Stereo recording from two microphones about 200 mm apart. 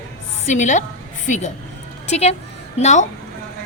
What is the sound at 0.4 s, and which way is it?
A woman's voice, 35° left (ahead or behind).